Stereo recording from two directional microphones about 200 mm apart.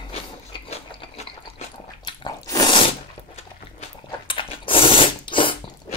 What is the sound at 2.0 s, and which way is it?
Biting, 20° left (ahead or behind).